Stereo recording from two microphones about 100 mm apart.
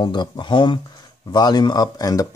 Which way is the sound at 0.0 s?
50° left (ahead or behind).